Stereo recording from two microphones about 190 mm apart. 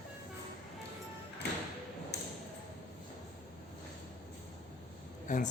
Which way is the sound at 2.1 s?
65° left (ahead or behind).